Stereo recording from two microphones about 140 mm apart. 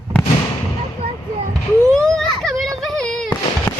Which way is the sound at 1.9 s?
5° left (ahead or behind).